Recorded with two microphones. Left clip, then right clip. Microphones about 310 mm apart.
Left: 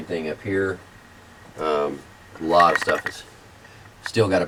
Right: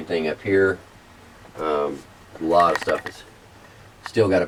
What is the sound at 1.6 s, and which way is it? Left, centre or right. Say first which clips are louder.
Speech: even; centre.